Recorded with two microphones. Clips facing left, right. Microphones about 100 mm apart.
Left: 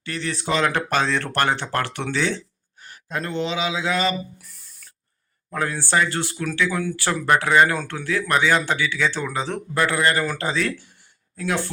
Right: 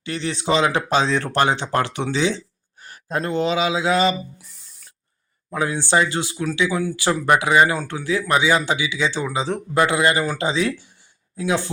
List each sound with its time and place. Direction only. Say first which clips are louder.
0.0 s speech: right 3 dB; 25° right (ahead or behind)
0.6 s a man's voice: even; 10° right (ahead or behind)
2.8 s speech: right 4 dB; 40° right (ahead or behind)
5.5 s a man's voice: right 3 dB; 15° right (ahead or behind)